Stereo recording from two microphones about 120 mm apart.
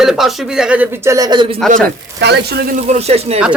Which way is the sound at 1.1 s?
30° right (ahead or behind).